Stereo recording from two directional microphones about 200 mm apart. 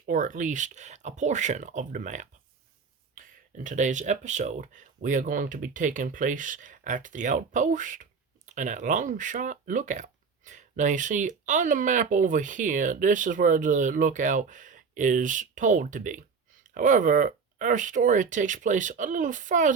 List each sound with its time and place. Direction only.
0.0 s speech: 40° right (ahead or behind)